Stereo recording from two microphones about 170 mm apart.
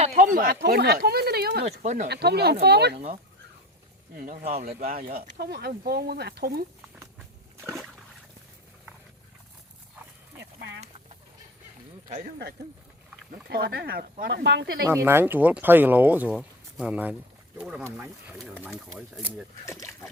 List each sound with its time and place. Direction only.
0.0 s speech: 45° right (ahead or behind)
0.6 s speech: 75° right (ahead or behind)
1.6 s speech: 45° right (ahead or behind)
2.0 s speech: 75° right (ahead or behind)
4.1 s speech: 55° right (ahead or behind)
10.3 s clip-clop: 85° right
13.5 s speech: 70° right (ahead or behind)
14.8 s speech: 15° right (ahead or behind)
19.6 s speech: 15° left (ahead or behind)